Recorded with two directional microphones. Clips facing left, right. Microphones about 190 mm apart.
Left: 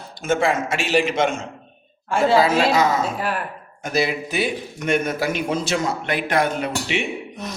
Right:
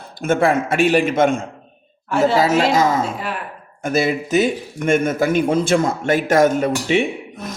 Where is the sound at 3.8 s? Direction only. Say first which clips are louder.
Right 4 dB; 50° right (ahead or behind).